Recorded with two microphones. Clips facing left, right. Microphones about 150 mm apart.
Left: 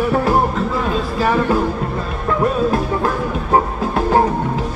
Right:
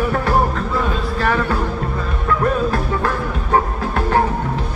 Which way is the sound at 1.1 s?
10° left (ahead or behind).